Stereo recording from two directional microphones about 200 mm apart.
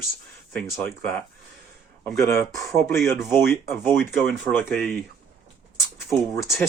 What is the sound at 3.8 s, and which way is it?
Speech, centre (ahead or behind).